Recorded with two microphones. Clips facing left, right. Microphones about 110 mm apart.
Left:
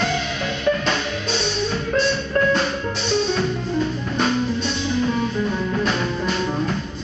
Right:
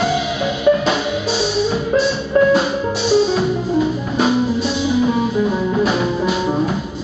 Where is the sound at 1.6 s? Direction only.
10° right (ahead or behind).